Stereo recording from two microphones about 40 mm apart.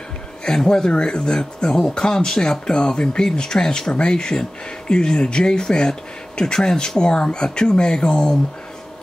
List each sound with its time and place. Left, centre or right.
0.7 s speech: centre